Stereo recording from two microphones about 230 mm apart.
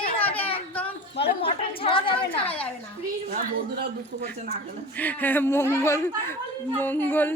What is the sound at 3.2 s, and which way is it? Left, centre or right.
Speech, right.